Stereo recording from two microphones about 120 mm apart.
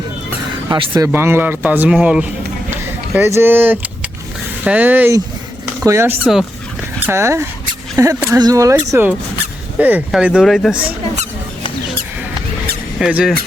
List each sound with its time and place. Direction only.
0.7 s speech: 35° right (ahead or behind)
1.1 s a man's voice: 20° right (ahead or behind)
3.2 s a man's voice: 20° right (ahead or behind)
8.9 s a man's voice: 20° right (ahead or behind); by 10.8 s centre (ahead or behind)
13.0 s a man's voice: 5° right (ahead or behind)